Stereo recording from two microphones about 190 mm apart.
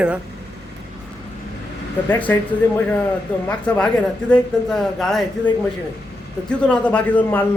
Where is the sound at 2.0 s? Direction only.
10° left (ahead or behind).